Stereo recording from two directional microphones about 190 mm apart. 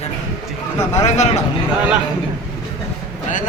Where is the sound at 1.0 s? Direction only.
35° left (ahead or behind).